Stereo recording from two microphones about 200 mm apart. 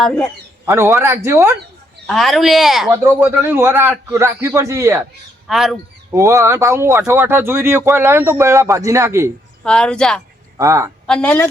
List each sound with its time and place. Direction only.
0.0 s speech: 5° left (ahead or behind)
0.6 s speech: 15° right (ahead or behind)
2.0 s speech: centre (ahead or behind)
5.5 s speech: centre (ahead or behind)
6.1 s speech: 15° right (ahead or behind)
9.6 s speech: 5° left (ahead or behind)
10.6 s speech: 15° right (ahead or behind)
11.0 s speech: 5° left (ahead or behind)